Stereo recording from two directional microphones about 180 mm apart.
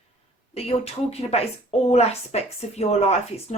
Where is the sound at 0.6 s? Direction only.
35° left (ahead or behind).